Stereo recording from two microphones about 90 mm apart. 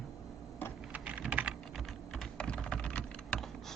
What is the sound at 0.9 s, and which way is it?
Typing, 15° right (ahead or behind).